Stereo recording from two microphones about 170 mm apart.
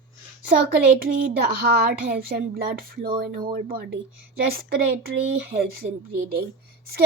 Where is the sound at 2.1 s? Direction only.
60° right (ahead or behind).